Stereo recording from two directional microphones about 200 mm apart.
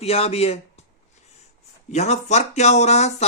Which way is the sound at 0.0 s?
30° left (ahead or behind).